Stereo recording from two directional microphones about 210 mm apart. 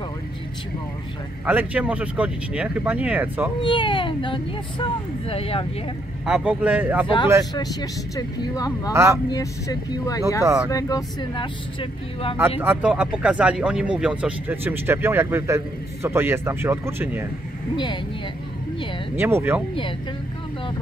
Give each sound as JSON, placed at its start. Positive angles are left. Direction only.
{"t": 1.4, "sound": "speech", "side_deg": -10}
{"t": 3.6, "sound": "speech", "side_deg": 25}
{"t": 6.2, "sound": "speech", "side_deg": -5}
{"t": 7.5, "sound": "speech", "side_deg": 20}
{"t": 8.9, "sound": "speech", "side_deg": -15}
{"t": 9.3, "sound": "speech", "side_deg": 15}
{"t": 10.4, "sound": "speech", "side_deg": -15}
{"t": 10.7, "sound": "speech", "side_deg": 15}
{"t": 12.4, "sound": "speech", "side_deg": -10}
{"t": 19.1, "sound": "speech", "side_deg": -10}